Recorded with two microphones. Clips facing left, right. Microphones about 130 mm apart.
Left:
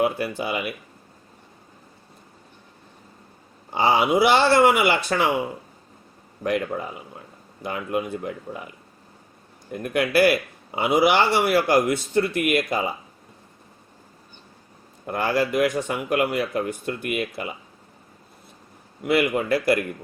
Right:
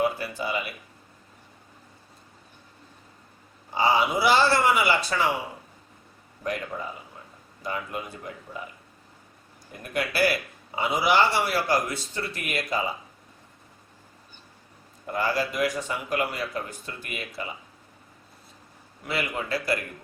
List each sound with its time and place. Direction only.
0.0 s a man's voice: 60° left (ahead or behind)
3.8 s a man's voice: 60° left (ahead or behind)
7.6 s a man's voice: 55° left (ahead or behind)
9.7 s a man's voice: 55° left (ahead or behind)
15.0 s a man's voice: 60° left (ahead or behind)
19.0 s a man's voice: 55° left (ahead or behind)